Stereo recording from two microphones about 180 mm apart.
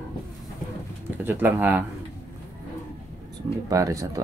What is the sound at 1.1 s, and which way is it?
Speech, 10° right (ahead or behind).